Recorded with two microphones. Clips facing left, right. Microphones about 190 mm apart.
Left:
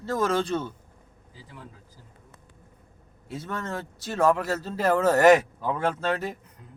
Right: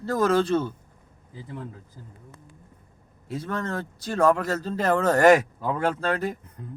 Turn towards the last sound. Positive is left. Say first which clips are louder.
# right 2 dB
turn(degrees=0)  # may be behind; listen again after turning